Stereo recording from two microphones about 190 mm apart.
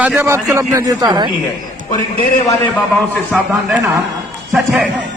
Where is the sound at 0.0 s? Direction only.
10° right (ahead or behind).